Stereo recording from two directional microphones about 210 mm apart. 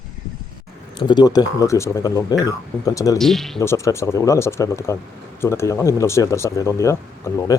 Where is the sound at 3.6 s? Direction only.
15° left (ahead or behind).